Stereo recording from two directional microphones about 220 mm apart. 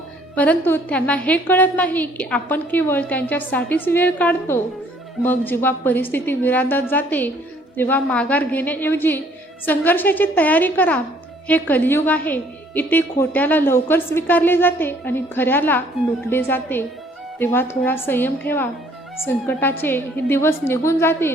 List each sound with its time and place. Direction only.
0.3 s a woman's voice: 10° left (ahead or behind)